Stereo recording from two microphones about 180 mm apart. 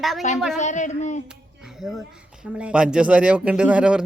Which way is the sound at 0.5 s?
40° left (ahead or behind).